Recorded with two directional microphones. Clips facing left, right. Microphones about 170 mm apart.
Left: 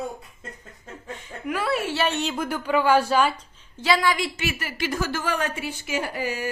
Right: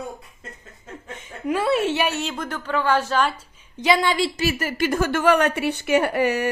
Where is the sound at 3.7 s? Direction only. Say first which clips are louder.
Right 2 dB; 20° right (ahead or behind).